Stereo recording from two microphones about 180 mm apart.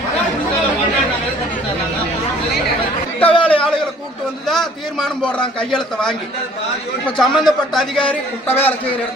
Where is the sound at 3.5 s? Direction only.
5° left (ahead or behind).